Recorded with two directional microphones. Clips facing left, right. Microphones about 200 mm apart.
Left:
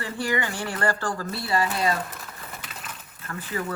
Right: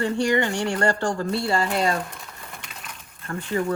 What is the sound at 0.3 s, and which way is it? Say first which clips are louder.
Speech: right 6 dB; 25° right (ahead or behind).